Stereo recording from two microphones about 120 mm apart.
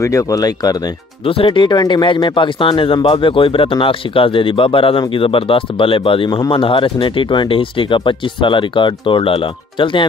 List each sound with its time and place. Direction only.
0.0 s speech: 25° left (ahead or behind)
1.2 s speech: 50° left (ahead or behind)